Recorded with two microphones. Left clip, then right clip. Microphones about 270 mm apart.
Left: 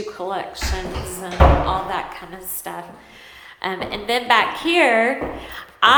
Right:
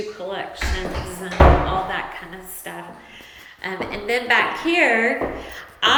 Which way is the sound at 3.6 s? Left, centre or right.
Centre.